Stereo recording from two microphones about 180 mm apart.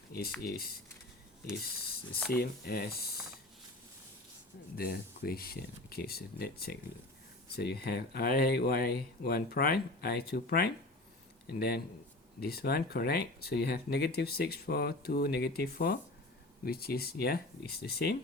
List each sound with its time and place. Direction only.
0.1 s typing: 55° left (ahead or behind)
0.4 s speech: 55° left (ahead or behind)
2.3 s speech: 60° left (ahead or behind)
4.8 s speech: 60° left (ahead or behind)